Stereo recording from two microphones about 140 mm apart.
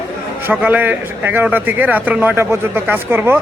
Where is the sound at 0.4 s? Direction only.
10° right (ahead or behind).